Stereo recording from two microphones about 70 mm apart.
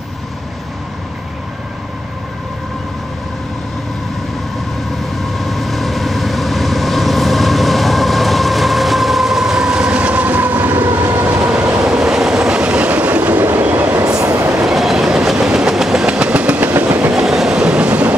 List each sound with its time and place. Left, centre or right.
5.3 s vehicle: centre; by 10.9 s right
11.0 s train: right
11.3 s train: centre
13.9 s train: right
14.5 s train: centre; by 17.1 s right
17.1 s train: centre